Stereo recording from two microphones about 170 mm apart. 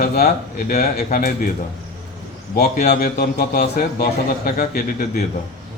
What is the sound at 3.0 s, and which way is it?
A man's voice, 60° left (ahead or behind).